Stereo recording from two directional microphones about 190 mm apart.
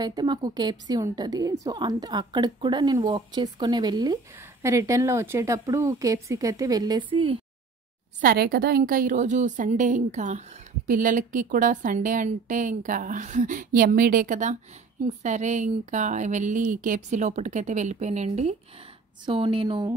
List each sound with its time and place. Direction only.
0.0 s a woman's voice: 20° right (ahead or behind)
8.2 s a woman's voice: 55° right (ahead or behind); by 20.0 s 20° right (ahead or behind)